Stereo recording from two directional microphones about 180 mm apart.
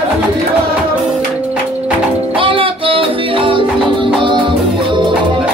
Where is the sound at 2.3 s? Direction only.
30° right (ahead or behind).